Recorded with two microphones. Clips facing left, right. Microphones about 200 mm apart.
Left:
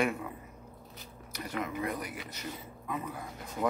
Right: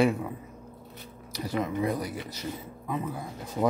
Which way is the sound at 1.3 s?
35° right (ahead or behind).